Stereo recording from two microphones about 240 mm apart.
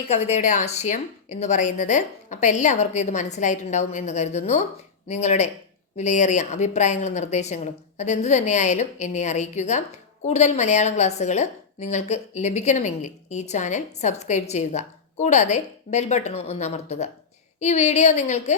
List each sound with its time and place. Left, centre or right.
0.1 s a woman's voice: left